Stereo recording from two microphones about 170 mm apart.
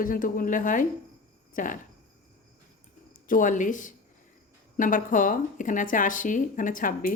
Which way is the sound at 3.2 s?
50° left (ahead or behind).